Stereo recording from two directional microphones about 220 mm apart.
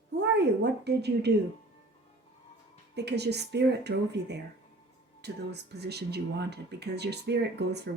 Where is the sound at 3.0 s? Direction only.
50° right (ahead or behind).